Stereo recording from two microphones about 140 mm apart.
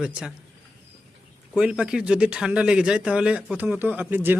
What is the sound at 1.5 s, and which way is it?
A man's voice, 5° right (ahead or behind).